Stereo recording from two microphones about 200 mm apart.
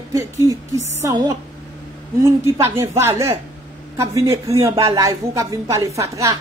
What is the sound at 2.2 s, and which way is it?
Speech, 15° right (ahead or behind).